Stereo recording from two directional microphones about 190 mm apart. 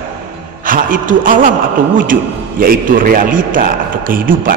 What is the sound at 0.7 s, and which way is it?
Speech, 45° right (ahead or behind).